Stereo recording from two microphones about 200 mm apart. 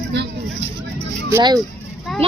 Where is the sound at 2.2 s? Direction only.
30° right (ahead or behind).